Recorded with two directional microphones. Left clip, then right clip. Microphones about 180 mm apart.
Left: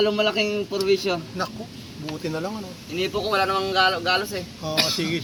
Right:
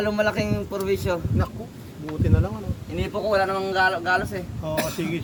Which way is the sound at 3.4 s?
40° right (ahead or behind).